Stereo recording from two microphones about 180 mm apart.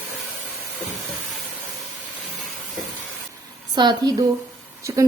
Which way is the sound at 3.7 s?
25° right (ahead or behind).